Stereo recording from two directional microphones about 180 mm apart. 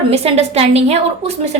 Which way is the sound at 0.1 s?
35° right (ahead or behind).